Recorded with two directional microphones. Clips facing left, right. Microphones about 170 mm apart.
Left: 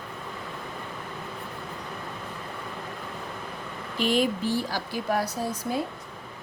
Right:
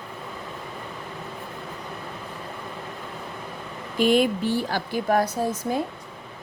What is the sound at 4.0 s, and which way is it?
A woman's voice, 55° right (ahead or behind).